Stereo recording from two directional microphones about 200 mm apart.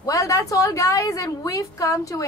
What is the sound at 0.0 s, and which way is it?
A woman's voice, 15° left (ahead or behind).